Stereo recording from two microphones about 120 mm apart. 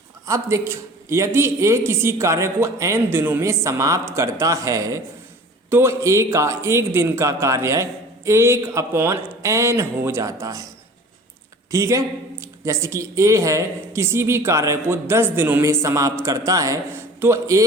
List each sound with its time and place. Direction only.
0.3 s a man's voice: 25° right (ahead or behind)
11.7 s a man's voice: 25° right (ahead or behind)